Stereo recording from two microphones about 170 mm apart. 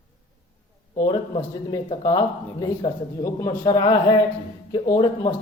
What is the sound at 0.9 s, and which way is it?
Speech, 25° left (ahead or behind).